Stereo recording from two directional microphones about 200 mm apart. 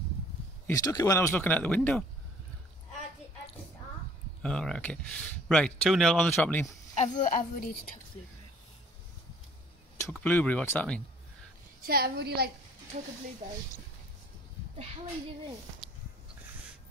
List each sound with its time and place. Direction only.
0.7 s speech: 20° left (ahead or behind)
4.4 s speech: 5° left (ahead or behind)
7.0 s a woman's voice: 40° left (ahead or behind)
10.2 s speech: 10° left (ahead or behind)
11.8 s a woman's voice: 50° right (ahead or behind)
12.9 s speech: 40° right (ahead or behind)